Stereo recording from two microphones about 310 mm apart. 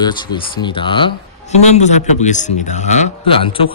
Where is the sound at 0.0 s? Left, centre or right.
Centre.